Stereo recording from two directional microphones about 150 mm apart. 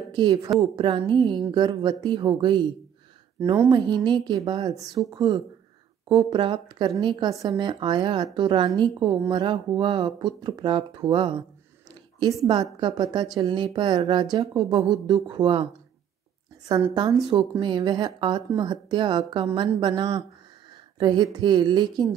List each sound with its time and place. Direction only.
0.1 s a woman's voice: 30° right (ahead or behind)
3.6 s a woman's voice: 30° right (ahead or behind)
16.9 s a woman's voice: 30° right (ahead or behind)